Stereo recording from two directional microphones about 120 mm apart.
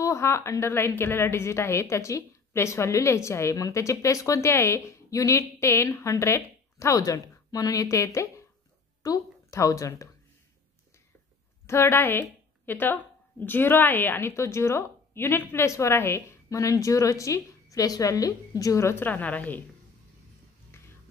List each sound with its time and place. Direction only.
0.0 s a woman's voice: 25° left (ahead or behind)
11.6 s a woman's voice: 20° left (ahead or behind)